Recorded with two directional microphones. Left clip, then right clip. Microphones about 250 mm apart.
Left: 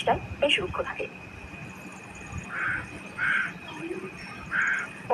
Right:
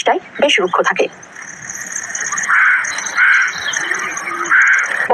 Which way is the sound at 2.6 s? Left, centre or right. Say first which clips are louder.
Right 16 dB; right.